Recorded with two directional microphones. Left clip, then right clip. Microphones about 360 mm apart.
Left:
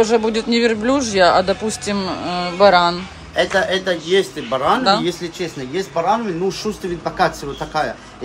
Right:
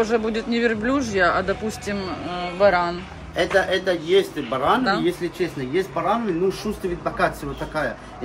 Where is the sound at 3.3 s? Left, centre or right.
Left.